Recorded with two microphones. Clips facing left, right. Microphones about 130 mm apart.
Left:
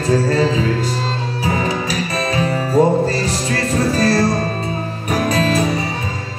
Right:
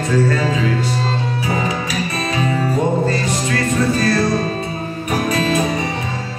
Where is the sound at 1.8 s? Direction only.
40° left (ahead or behind).